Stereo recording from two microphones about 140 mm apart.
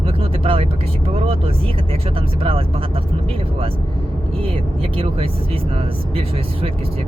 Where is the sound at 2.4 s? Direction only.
40° right (ahead or behind).